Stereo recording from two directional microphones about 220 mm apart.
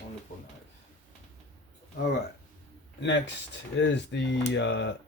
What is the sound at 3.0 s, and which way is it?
Speech, 55° left (ahead or behind).